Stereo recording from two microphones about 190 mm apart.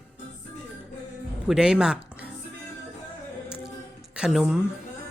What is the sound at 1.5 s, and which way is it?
Speech, 5° right (ahead or behind).